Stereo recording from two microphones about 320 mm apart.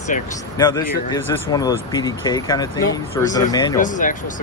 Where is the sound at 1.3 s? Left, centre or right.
Centre.